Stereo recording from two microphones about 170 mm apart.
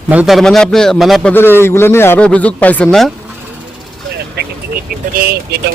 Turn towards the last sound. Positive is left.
turn(degrees=-65)  # may be behind; listen again after turning